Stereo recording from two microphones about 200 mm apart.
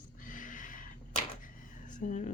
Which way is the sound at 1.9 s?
40° left (ahead or behind).